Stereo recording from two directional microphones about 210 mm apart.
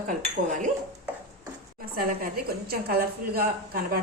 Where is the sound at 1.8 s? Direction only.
45° right (ahead or behind).